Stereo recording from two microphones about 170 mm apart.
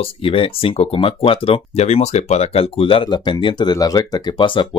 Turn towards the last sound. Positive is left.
turn(degrees=30)  # may be behind; listen again after turning